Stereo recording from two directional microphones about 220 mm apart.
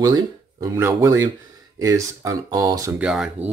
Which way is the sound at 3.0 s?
5° right (ahead or behind).